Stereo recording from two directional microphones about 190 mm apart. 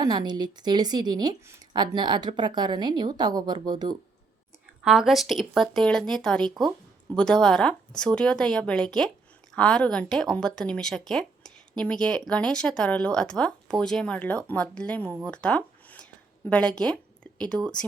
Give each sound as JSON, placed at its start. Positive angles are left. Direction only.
{"t": 0.0, "sound": "speech", "side_deg": -20}
{"t": 4.8, "sound": "speech", "side_deg": 0}
{"t": 6.5, "sound": "speech", "side_deg": -20}
{"t": 7.2, "sound": "speech", "side_deg": 5}